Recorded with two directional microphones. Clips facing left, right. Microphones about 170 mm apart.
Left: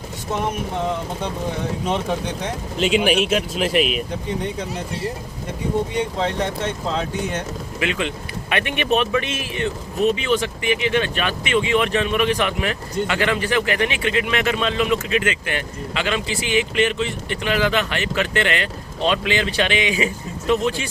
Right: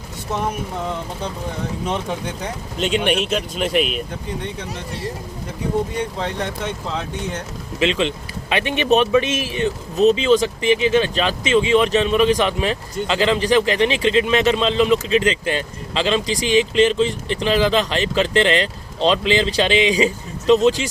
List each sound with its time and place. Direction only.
2.7 s speech: 5° left (ahead or behind)
7.8 s speech: 25° right (ahead or behind)